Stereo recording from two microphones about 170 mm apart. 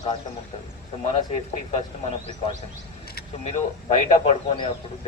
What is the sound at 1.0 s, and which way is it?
Speech, 40° left (ahead or behind).